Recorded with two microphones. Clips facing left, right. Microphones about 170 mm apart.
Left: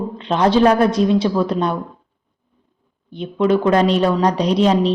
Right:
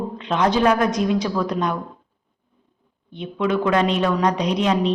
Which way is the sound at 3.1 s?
35° left (ahead or behind).